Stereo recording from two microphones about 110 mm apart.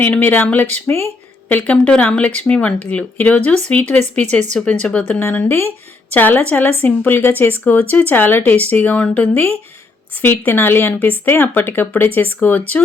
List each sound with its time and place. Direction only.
0.0 s a woman's voice: 15° left (ahead or behind)